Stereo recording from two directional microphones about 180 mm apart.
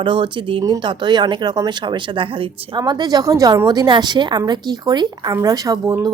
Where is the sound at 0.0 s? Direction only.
25° right (ahead or behind).